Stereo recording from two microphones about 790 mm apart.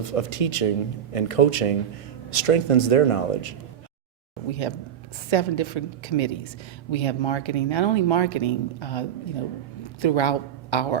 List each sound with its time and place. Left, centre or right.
0.0 s speech: left
5.3 s a woman's voice: left